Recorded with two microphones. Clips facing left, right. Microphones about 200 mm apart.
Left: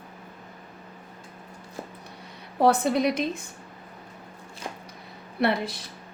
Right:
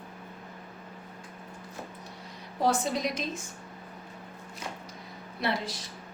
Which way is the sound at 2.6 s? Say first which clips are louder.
Left 7 dB; 60° left (ahead or behind).